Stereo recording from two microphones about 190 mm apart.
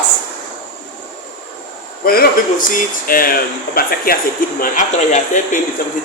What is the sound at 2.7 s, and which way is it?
A man's voice, 50° left (ahead or behind).